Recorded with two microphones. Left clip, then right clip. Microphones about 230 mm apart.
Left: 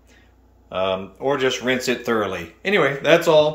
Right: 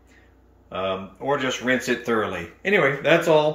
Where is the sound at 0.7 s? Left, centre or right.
Centre.